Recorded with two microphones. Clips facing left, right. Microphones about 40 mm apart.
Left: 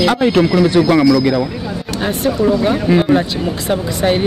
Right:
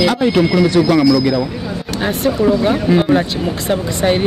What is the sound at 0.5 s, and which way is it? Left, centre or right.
Speech, centre.